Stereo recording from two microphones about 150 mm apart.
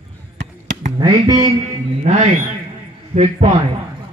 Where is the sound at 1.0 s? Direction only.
25° right (ahead or behind).